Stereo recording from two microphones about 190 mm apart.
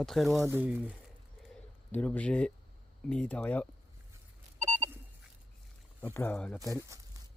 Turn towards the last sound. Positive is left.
turn(degrees=-15)  # may be behind; listen again after turning